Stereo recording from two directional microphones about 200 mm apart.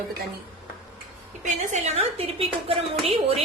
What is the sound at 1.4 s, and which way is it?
A woman's voice, 35° right (ahead or behind).